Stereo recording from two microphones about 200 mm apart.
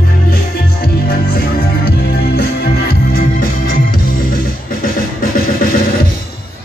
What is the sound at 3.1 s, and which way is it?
Organ, 50° left (ahead or behind).